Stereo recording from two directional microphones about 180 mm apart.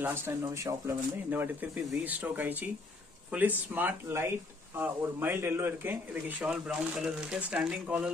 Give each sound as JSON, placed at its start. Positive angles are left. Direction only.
{"t": 0.0, "sound": "speech", "side_deg": -15}